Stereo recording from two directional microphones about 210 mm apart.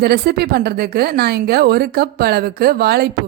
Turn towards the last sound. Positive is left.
turn(degrees=-50)  # may be behind; listen again after turning